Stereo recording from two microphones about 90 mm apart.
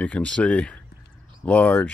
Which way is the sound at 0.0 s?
15° left (ahead or behind).